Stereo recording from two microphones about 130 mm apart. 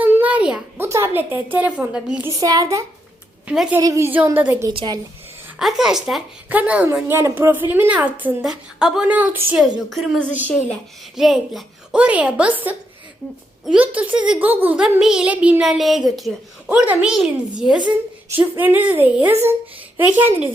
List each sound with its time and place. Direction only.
0.0 s a sound: 15° right (ahead or behind)
0.8 s speech: 20° right (ahead or behind)
2.4 s a child's voice: 30° right (ahead or behind)
3.4 s a woman's voice: 5° right (ahead or behind)
3.8 s a child's voice: 25° right (ahead or behind)
4.4 s speech: 15° right (ahead or behind)
4.7 s a woman's voice: 45° right (ahead or behind)
5.5 s a woman's voice: 5° right (ahead or behind)
9.6 s a woman's voice: 5° right (ahead or behind)
16.6 s speech: 10° right (ahead or behind)